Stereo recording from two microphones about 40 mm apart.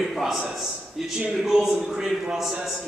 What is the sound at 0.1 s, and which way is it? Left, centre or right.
A man's voice, centre.